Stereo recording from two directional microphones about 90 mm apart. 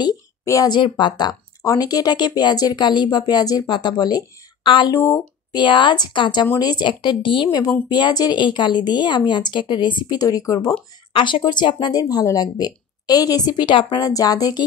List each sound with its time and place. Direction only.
0.7 s a woman's voice: 60° left (ahead or behind)
4.6 s a woman's voice: 65° left (ahead or behind)
4.9 s speech: 35° left (ahead or behind)
5.5 s a woman's voice: 60° left (ahead or behind)
6.9 s speech: 60° left (ahead or behind)
7.9 s a woman's voice: 50° left (ahead or behind)
11.1 s a woman's voice: 65° left (ahead or behind)
12.0 s a woman's voice: 45° left (ahead or behind)